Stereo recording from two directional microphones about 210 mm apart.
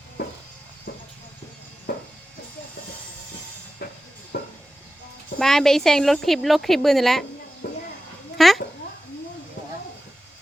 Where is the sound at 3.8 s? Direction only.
45° left (ahead or behind).